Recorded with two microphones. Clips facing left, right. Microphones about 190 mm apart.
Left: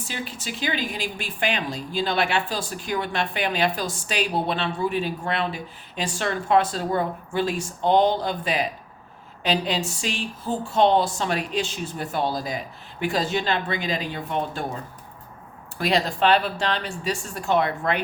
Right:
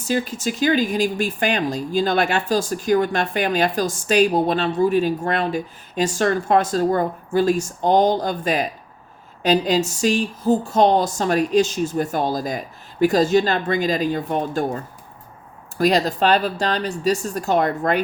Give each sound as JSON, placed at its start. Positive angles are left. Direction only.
{"t": 0.0, "sound": "speech", "side_deg": -45}
{"t": 15.8, "sound": "speech", "side_deg": -40}